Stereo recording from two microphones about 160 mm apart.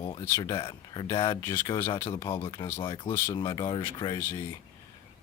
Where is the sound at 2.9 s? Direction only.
30° left (ahead or behind).